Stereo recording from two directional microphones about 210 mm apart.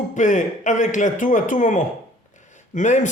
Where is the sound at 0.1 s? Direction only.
35° left (ahead or behind).